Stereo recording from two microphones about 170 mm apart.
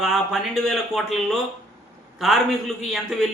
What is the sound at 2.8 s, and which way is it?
Speech, centre (ahead or behind).